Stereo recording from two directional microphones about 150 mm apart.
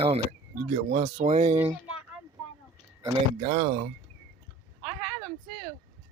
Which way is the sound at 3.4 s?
45° right (ahead or behind).